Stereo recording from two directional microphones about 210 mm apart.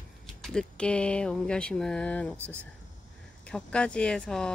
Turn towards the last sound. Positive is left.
turn(degrees=5)  # may be behind; listen again after turning